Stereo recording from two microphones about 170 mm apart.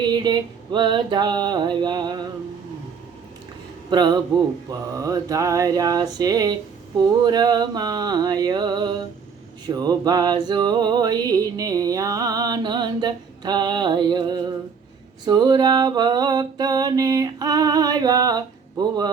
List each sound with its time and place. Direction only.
0.0 s music: 25° right (ahead or behind)
3.8 s music: 25° right (ahead or behind)